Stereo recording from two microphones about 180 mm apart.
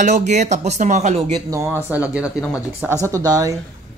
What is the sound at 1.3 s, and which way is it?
Speech, 20° right (ahead or behind).